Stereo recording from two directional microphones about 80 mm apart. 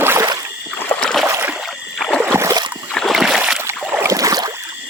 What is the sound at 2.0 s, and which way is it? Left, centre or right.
Rowboat, centre.